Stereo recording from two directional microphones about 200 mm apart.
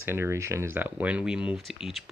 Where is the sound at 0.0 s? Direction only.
10° right (ahead or behind).